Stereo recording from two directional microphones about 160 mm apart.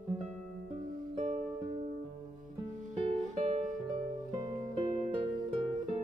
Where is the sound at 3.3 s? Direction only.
50° right (ahead or behind).